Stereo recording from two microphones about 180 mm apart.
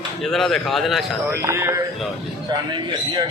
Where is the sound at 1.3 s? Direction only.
15° right (ahead or behind).